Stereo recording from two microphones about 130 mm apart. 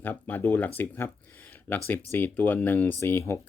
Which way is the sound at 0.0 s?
15° left (ahead or behind).